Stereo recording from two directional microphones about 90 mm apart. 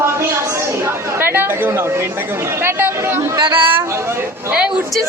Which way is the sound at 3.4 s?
65° right (ahead or behind).